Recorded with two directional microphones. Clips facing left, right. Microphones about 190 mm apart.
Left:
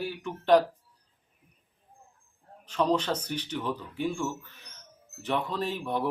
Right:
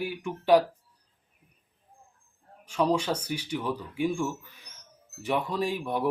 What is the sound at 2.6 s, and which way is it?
Speech, 10° right (ahead or behind).